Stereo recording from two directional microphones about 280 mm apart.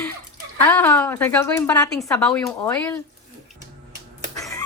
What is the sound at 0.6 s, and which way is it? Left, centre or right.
Speech, centre.